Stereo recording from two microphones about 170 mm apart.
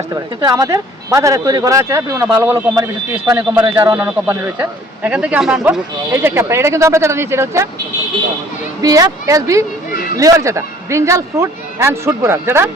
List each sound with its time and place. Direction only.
0.1 s a man's voice: 20° right (ahead or behind)
8.8 s a man's voice: 20° right (ahead or behind)